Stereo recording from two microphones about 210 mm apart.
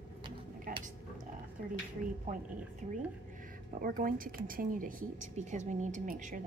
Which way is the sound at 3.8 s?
40° right (ahead or behind).